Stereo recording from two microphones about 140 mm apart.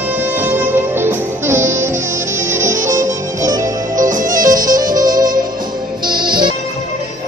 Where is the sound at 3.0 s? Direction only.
65° right (ahead or behind).